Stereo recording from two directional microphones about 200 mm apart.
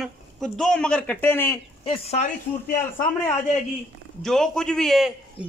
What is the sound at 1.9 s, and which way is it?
Speech, 30° left (ahead or behind).